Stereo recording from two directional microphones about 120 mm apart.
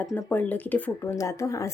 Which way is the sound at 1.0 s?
25° left (ahead or behind).